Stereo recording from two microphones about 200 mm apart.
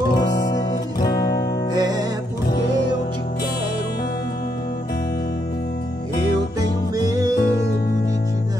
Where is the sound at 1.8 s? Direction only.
20° right (ahead or behind).